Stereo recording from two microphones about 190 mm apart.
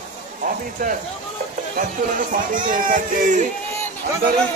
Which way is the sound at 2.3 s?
45° right (ahead or behind).